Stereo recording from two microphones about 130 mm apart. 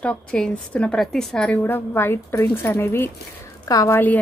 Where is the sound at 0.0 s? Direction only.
10° left (ahead or behind).